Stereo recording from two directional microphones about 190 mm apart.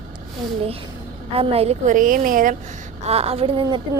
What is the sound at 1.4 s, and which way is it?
A woman's voice, 30° right (ahead or behind).